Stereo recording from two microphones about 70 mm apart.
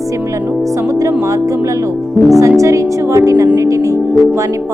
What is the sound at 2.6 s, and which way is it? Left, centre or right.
Music, right.